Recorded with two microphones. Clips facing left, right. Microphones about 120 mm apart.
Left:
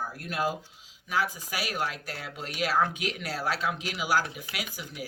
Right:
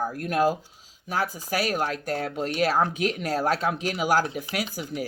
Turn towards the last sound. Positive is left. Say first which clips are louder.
# right 8 dB
turn(degrees=-45)  # may be behind; listen again after turning